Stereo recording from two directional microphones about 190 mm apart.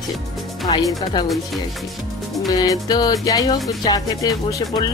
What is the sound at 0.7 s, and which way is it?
Speech, 25° left (ahead or behind).